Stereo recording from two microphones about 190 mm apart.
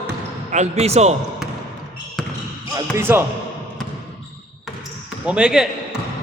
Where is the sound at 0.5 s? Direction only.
35° right (ahead or behind).